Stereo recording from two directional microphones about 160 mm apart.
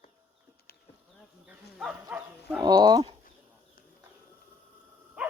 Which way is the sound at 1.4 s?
5° right (ahead or behind).